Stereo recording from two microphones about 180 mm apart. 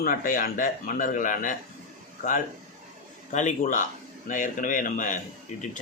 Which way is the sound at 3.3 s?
45° left (ahead or behind).